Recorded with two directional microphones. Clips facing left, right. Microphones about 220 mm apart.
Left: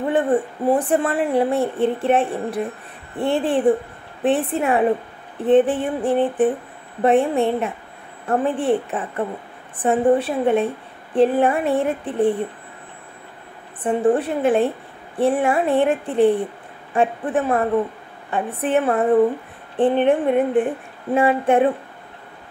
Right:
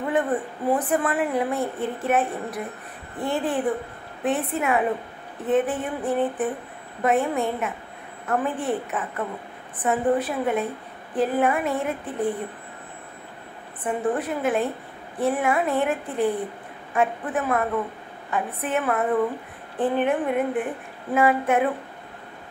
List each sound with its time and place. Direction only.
0.0 s a woman's voice: 30° left (ahead or behind)
13.8 s a woman's voice: 30° left (ahead or behind)